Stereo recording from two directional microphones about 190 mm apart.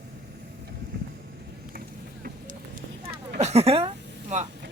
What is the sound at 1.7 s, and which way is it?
Vehicle, 50° right (ahead or behind).